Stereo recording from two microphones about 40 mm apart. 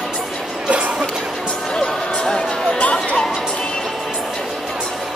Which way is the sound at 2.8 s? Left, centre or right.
Left.